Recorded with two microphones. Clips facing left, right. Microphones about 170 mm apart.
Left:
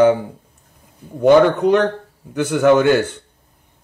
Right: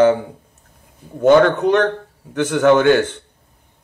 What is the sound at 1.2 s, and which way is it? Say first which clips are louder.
Speech: even; 10° left (ahead or behind).